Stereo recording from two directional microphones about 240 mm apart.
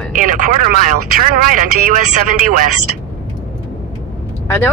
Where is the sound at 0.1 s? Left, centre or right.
Right.